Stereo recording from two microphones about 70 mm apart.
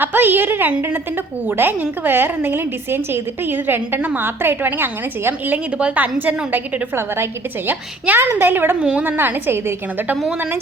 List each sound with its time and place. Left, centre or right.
0.0 s a woman's voice: right
5.7 s a woman's voice: centre
8.8 s a woman's voice: centre
9.0 s a woman's voice: right